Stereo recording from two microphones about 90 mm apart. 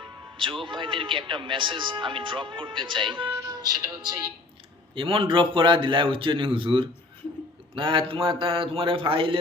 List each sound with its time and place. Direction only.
0.3 s a man's voice: 70° right (ahead or behind)
3.4 s speech: 45° right (ahead or behind)
4.9 s a man's voice: 75° right (ahead or behind)